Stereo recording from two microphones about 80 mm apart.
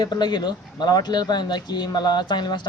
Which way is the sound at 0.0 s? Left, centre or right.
Left.